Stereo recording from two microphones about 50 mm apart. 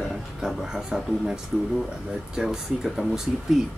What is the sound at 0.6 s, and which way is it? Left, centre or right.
Speech, centre.